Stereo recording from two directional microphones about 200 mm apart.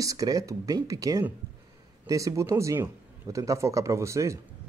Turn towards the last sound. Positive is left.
turn(degrees=-15)  # may be behind; listen again after turning